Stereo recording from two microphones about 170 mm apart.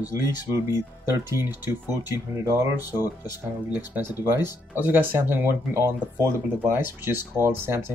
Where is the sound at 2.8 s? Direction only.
20° left (ahead or behind).